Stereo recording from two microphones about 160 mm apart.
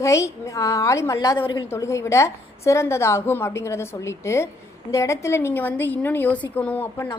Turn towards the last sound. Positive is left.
turn(degrees=10)  # may be behind; listen again after turning